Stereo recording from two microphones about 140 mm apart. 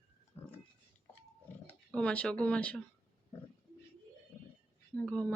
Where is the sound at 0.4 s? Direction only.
15° left (ahead or behind).